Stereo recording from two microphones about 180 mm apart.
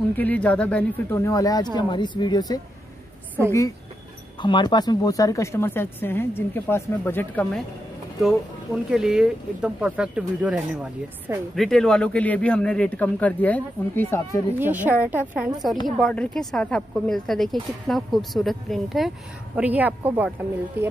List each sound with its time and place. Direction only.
0.1 s a woman's voice: 10° left (ahead or behind)
4.4 s speech: 25° left (ahead or behind)
8.2 s speech: centre (ahead or behind)
14.6 s a woman's voice: 10° right (ahead or behind)